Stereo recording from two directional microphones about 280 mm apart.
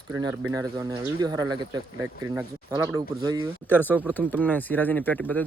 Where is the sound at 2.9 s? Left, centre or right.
Centre.